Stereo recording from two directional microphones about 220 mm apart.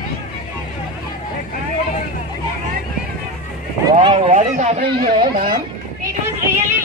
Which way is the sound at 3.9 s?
20° right (ahead or behind).